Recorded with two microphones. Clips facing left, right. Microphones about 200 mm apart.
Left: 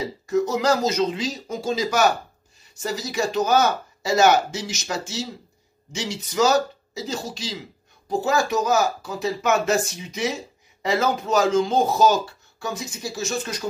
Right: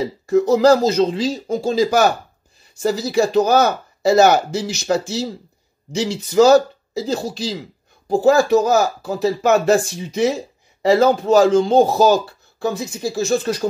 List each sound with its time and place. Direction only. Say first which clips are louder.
0.4 s speech: right 8 dB; 35° right (ahead or behind)